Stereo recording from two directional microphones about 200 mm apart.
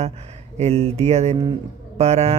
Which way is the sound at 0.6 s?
30° right (ahead or behind).